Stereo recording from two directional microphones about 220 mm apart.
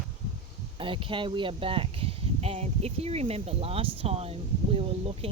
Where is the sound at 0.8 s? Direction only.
25° right (ahead or behind).